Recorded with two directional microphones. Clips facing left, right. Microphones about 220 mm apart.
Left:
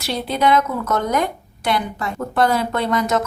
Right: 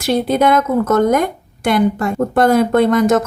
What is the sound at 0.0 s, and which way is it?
A woman's voice, 50° right (ahead or behind).